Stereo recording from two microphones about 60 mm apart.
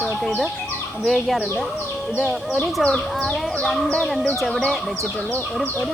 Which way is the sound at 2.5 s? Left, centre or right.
Centre.